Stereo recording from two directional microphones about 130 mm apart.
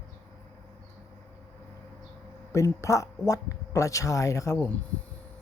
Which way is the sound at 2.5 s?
20° left (ahead or behind).